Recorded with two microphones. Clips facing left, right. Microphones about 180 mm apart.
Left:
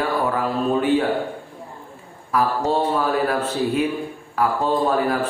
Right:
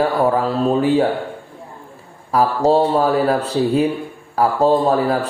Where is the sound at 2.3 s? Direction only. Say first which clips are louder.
Right 5 dB; 35° right (ahead or behind).